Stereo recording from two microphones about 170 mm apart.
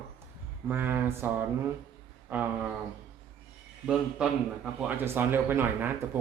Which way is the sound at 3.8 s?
5° right (ahead or behind).